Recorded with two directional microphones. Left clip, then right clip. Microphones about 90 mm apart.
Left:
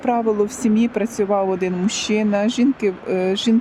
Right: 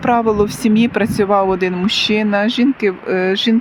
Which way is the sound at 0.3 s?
50° left (ahead or behind).